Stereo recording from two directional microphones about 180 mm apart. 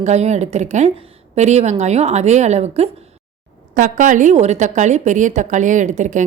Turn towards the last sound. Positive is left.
turn(degrees=-45)  # may be behind; listen again after turning